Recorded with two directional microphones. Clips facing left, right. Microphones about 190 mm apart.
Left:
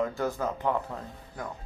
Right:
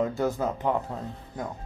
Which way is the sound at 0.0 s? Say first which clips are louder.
Right 3 dB; 20° right (ahead or behind).